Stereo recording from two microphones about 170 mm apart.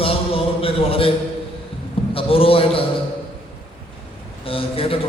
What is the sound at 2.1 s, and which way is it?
Speech, 35° left (ahead or behind).